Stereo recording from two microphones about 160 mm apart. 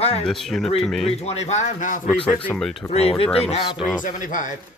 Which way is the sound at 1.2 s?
40° left (ahead or behind).